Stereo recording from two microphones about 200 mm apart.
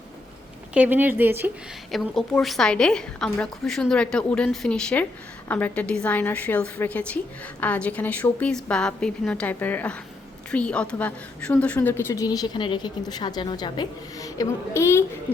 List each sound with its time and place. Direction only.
0.7 s speech: 10° right (ahead or behind)
1.9 s a woman's voice: centre (ahead or behind)